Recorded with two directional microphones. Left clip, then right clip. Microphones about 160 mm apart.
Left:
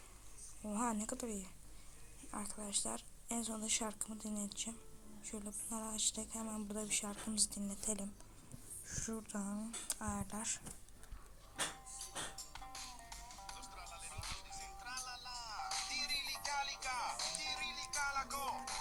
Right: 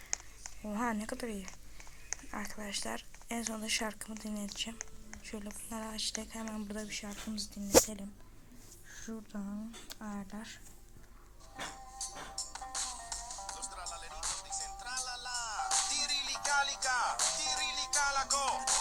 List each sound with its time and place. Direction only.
0.6 s speech: centre (ahead or behind)
12.4 s music: 65° right (ahead or behind)